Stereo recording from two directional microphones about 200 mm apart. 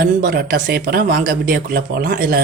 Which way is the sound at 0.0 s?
50° right (ahead or behind).